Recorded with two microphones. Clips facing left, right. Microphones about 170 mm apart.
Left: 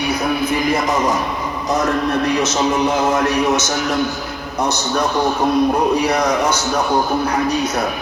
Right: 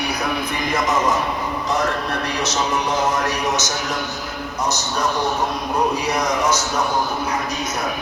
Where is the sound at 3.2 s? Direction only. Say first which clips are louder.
Left 5 dB; 55° left (ahead or behind).